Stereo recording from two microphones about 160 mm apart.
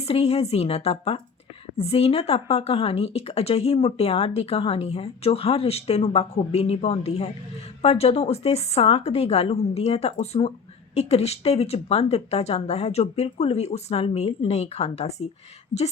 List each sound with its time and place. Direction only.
0.0 s speech: 40° left (ahead or behind)